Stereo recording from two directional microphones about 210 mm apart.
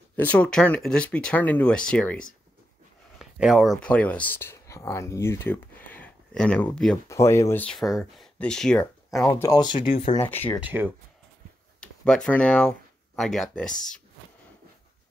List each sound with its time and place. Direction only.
0.1 s speech: 10° left (ahead or behind)
3.2 s a sound: centre (ahead or behind)
3.8 s speech: 5° left (ahead or behind)
9.4 s speech: 20° left (ahead or behind)
10.2 s speech: 10° left (ahead or behind)
10.6 s speech: 10° right (ahead or behind)
11.8 s speech: 5° left (ahead or behind)